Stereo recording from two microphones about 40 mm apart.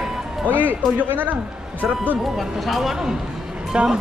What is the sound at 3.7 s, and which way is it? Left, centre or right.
Speech, right.